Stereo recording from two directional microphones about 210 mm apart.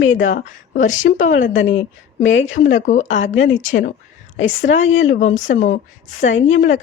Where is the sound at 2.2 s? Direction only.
65° left (ahead or behind).